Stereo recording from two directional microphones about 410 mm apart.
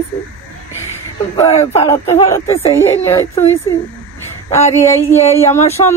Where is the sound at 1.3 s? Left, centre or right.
Centre.